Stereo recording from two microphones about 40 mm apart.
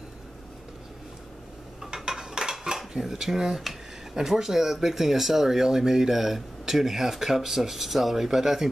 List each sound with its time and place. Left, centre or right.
1.8 s cutlery: centre
3.0 s speech: centre